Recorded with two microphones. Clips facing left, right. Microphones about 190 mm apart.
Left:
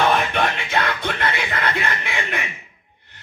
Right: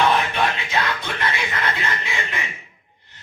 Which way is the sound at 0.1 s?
60° left (ahead or behind).